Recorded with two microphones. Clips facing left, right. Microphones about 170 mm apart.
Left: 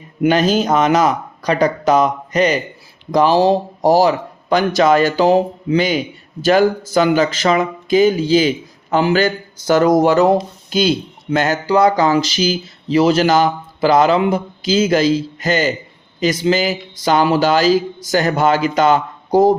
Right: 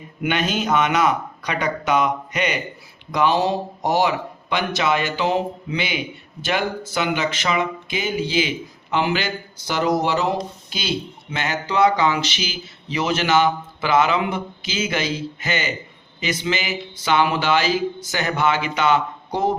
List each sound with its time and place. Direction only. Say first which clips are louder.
0.2 s speech: left 9 dB; 35° left (ahead or behind)